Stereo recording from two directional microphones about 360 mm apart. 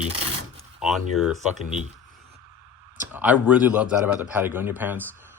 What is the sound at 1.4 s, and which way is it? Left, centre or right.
Speech, centre.